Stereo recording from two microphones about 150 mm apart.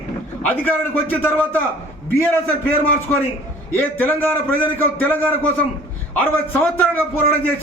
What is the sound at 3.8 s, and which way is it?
A man's voice, 15° left (ahead or behind).